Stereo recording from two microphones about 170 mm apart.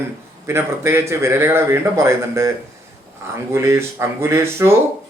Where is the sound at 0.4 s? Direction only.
15° right (ahead or behind).